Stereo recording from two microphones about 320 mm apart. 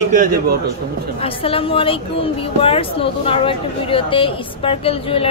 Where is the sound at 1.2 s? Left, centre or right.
Centre.